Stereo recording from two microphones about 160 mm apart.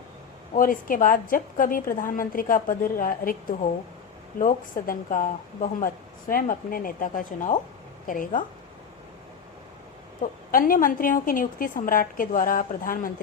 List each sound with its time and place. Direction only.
0.5 s a woman's voice: 60° left (ahead or behind)
10.5 s a woman's voice: 60° left (ahead or behind)